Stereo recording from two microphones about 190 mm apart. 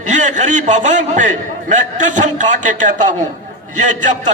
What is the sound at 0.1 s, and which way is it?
A man's voice, 40° right (ahead or behind).